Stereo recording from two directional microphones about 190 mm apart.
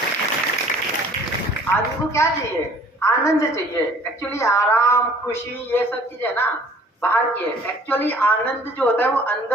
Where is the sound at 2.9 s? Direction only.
15° left (ahead or behind).